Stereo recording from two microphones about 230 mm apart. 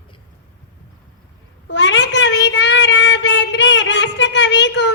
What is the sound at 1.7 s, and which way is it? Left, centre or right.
Child singing, left.